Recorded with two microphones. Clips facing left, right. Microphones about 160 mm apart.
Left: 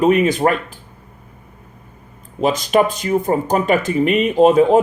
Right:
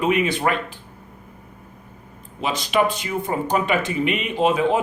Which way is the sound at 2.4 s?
45° left (ahead or behind).